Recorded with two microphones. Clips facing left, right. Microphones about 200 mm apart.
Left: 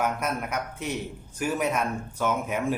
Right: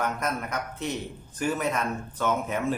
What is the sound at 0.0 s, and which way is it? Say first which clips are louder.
A man's voice: left 1 dB; 10° left (ahead or behind).